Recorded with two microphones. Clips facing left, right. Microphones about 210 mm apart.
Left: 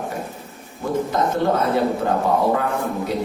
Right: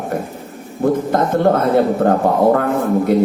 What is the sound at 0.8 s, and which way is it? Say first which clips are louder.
Speech: right 5 dB; 55° right (ahead or behind).